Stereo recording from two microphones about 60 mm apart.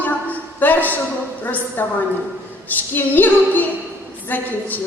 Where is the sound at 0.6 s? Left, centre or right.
Left.